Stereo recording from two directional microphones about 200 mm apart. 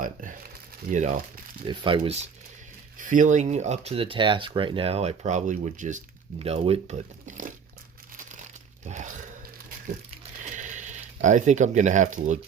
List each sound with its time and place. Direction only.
0.0 s speech: 40° right (ahead or behind)
1.6 s speech: 25° right (ahead or behind)
3.1 s speech: 40° right (ahead or behind)
8.9 s a sound: 40° right (ahead or behind)
10.5 s speech: 40° right (ahead or behind)